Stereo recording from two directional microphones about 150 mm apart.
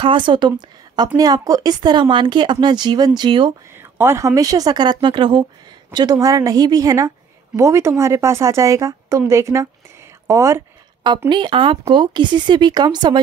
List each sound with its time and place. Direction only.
0.0 s a woman's voice: 35° right (ahead or behind)
3.7 s a woman's voice: 15° right (ahead or behind)
11.1 s speech: 30° right (ahead or behind)